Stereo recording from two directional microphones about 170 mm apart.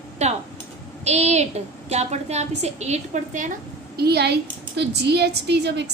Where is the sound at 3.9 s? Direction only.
70° right (ahead or behind).